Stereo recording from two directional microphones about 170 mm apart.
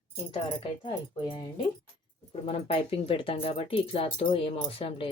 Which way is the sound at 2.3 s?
35° left (ahead or behind).